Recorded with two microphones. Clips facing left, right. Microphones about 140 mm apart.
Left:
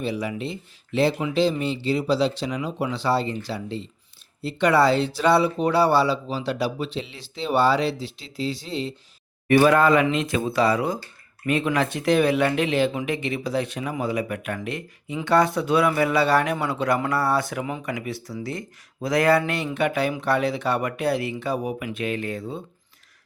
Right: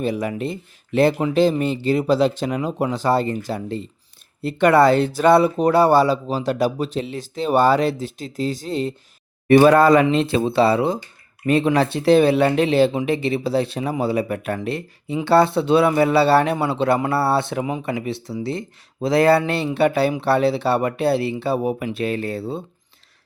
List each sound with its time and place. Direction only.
0.0 s speech: 50° right (ahead or behind)
9.5 s speech: 35° right (ahead or behind)